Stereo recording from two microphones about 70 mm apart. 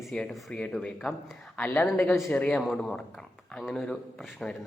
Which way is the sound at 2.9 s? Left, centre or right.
Centre.